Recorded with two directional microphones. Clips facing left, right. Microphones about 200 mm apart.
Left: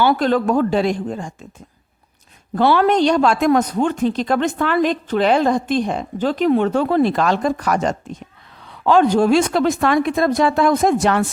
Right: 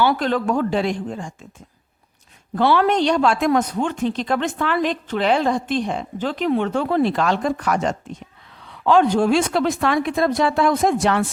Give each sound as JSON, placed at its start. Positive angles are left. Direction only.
{"t": 0.0, "sound": "a woman's voice", "side_deg": 45}
{"t": 2.6, "sound": "a woman's voice", "side_deg": 40}